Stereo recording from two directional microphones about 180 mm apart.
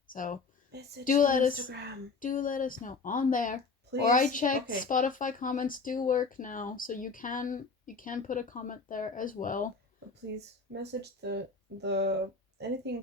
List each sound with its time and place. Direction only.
0.1 s speech: 50° left (ahead or behind)
0.7 s speech: 65° right (ahead or behind)
1.0 s speech: 50° left (ahead or behind)
11.2 s speech: 70° right (ahead or behind)